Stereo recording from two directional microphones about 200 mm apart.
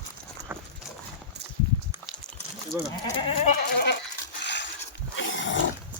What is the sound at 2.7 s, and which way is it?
Goat, 10° right (ahead or behind).